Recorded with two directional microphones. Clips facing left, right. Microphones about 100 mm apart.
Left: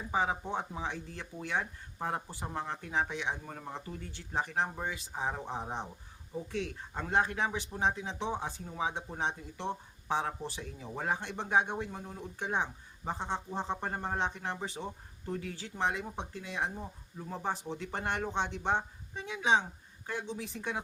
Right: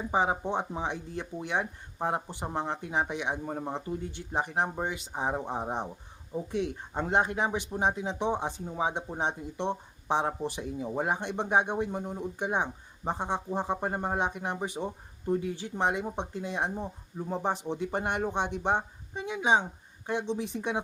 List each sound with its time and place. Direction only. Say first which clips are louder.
0.1 s speech: right 4 dB; 20° right (ahead or behind)